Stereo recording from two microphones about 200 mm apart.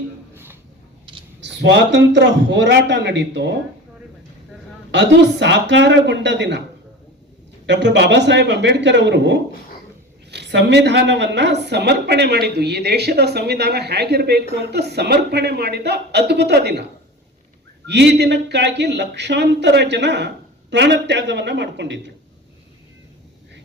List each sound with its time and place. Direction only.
1.4 s speech: 60° right (ahead or behind)
4.9 s speech: 60° right (ahead or behind)
7.7 s speech: 60° right (ahead or behind)
17.8 s speech: 55° right (ahead or behind)